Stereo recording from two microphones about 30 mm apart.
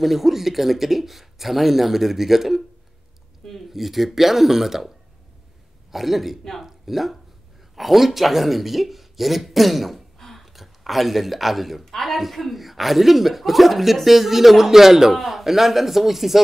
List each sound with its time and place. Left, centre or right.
0.0 s speech: centre
3.7 s a man's voice: centre
10.1 s a sound: centre
10.4 s speech: centre